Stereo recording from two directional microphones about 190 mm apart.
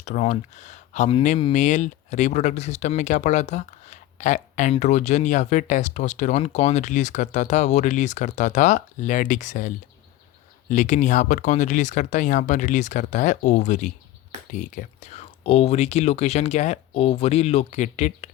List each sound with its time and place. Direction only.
0.0 s speech: 40° left (ahead or behind)